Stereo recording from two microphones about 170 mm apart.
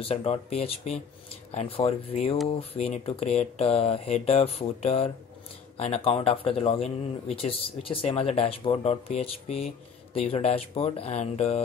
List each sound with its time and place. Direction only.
0.0 s speech: 35° left (ahead or behind)